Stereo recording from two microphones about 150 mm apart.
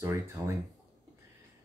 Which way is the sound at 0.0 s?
20° right (ahead or behind).